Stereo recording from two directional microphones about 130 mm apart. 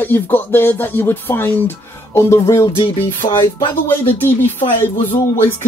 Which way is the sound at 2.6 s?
40° left (ahead or behind).